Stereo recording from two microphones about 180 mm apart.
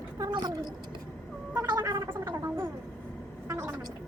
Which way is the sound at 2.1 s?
15° right (ahead or behind).